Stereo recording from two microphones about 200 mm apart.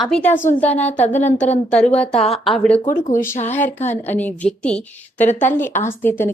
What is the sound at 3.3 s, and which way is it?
Speech, 35° left (ahead or behind).